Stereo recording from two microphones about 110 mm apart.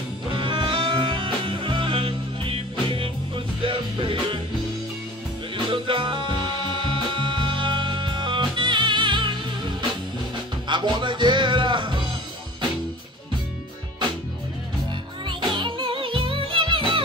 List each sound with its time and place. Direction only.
0.3 s music: 50° right (ahead or behind)
5.7 s music: 50° right (ahead or behind)
10.7 s music: 45° right (ahead or behind)
15.2 s music: 45° right (ahead or behind)